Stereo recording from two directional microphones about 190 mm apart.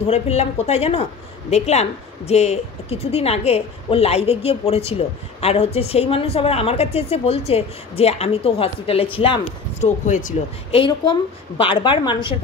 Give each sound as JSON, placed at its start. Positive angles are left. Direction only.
{"t": 0.0, "sound": "speech", "side_deg": 35}
{"t": 10.8, "sound": "a woman's voice", "side_deg": 25}